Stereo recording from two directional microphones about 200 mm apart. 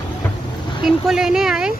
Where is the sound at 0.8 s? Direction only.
Centre (ahead or behind).